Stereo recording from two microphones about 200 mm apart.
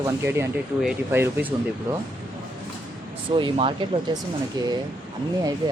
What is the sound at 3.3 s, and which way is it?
Speech, 25° right (ahead or behind).